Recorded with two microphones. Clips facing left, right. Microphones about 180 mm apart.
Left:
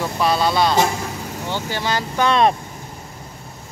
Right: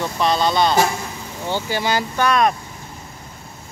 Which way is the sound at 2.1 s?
25° left (ahead or behind).